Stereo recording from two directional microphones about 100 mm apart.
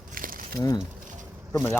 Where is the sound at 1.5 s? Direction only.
20° left (ahead or behind).